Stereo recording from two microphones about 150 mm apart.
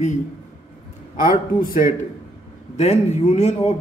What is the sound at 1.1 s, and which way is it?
Speech, 65° left (ahead or behind).